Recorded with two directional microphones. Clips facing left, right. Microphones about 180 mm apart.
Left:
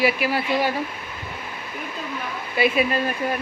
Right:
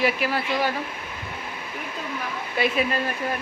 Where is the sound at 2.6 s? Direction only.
5° left (ahead or behind).